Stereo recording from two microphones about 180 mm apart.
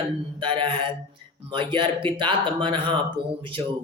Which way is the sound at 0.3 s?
25° right (ahead or behind).